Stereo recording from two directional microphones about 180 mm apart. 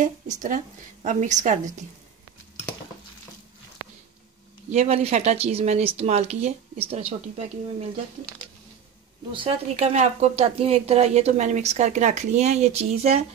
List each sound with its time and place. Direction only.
0.0 s a woman's voice: 45° right (ahead or behind)
4.6 s speech: 35° right (ahead or behind)
9.3 s speech: 30° right (ahead or behind)